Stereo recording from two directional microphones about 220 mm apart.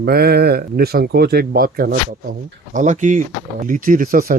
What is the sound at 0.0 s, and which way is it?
Speech, 45° right (ahead or behind).